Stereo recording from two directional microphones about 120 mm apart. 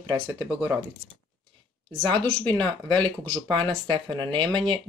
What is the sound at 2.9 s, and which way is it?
Speech, 40° right (ahead or behind).